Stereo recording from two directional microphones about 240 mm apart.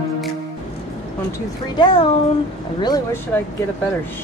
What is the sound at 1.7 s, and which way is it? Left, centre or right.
Speech, centre.